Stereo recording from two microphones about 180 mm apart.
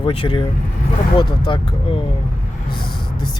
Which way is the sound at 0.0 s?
30° left (ahead or behind).